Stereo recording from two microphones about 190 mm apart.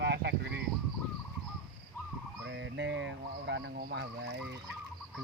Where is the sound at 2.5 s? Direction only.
70° right (ahead or behind).